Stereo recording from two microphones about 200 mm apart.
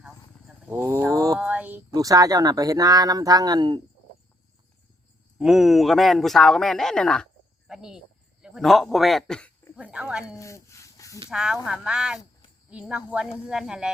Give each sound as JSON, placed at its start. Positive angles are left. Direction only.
{"t": 0.0, "sound": "a sound", "side_deg": -5}
{"t": 1.4, "sound": "speech", "side_deg": -5}
{"t": 5.4, "sound": "speech", "side_deg": -5}
{"t": 9.7, "sound": "speech", "side_deg": -5}
{"t": 10.2, "sound": "a sound", "side_deg": 15}
{"t": 11.3, "sound": "speech", "side_deg": -5}